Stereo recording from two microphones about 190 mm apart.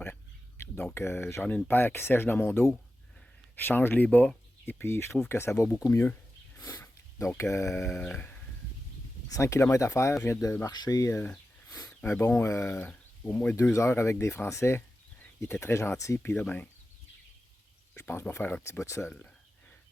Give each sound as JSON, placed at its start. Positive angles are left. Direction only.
{"t": 0.6, "sound": "speech", "side_deg": 10}
{"t": 6.6, "sound": "sniff", "side_deg": 15}
{"t": 7.8, "sound": "speech", "side_deg": 10}
{"t": 9.3, "sound": "speech", "side_deg": 15}
{"t": 17.9, "sound": "speech", "side_deg": 15}